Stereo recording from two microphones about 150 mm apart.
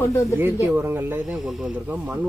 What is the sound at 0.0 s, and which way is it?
Speech, 20° left (ahead or behind).